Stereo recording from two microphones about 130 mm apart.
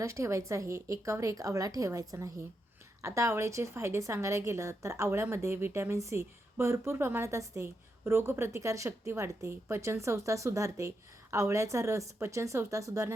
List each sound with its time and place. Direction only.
0.0 s a woman's voice: 20° right (ahead or behind)